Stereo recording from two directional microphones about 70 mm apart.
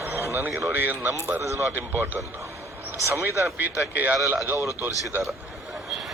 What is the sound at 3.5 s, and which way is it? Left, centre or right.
Speech, right.